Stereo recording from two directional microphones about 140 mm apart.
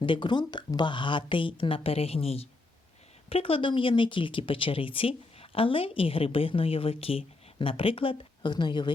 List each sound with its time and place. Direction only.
0.0 s speech: 35° left (ahead or behind)